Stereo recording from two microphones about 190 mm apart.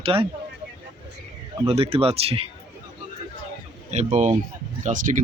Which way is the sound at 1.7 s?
30° right (ahead or behind).